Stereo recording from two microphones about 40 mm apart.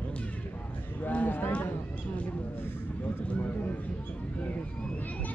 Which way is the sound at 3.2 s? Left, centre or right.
Left.